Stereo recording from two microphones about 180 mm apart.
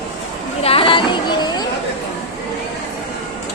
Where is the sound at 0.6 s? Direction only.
30° left (ahead or behind).